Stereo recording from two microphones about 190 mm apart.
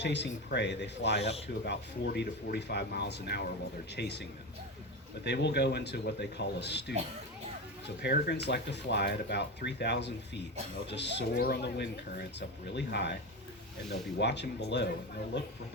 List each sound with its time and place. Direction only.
0.0 s speech: 65° left (ahead or behind)
8.0 s speech: 60° left (ahead or behind)